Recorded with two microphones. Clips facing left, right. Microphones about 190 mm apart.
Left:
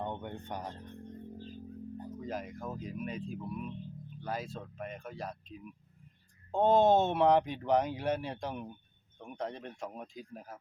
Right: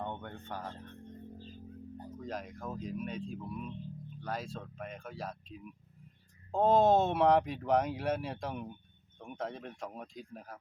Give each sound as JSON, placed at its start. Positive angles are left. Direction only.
{"t": 0.0, "sound": "speech", "side_deg": 15}
{"t": 2.1, "sound": "speech", "side_deg": 5}